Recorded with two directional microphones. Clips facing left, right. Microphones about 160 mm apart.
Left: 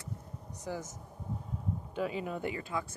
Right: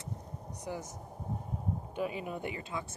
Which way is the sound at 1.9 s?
20° right (ahead or behind).